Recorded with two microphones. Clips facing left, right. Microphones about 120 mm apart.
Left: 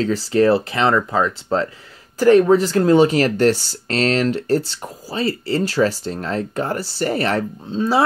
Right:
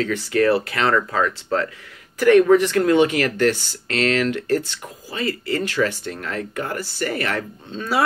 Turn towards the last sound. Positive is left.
turn(degrees=25)  # may be behind; listen again after turning